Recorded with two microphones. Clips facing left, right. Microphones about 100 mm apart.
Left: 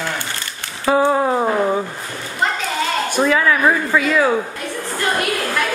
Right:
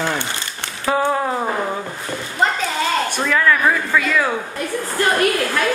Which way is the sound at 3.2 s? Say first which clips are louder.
Left 4 dB; 10° left (ahead or behind).